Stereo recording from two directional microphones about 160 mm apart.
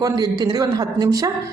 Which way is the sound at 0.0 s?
25° right (ahead or behind).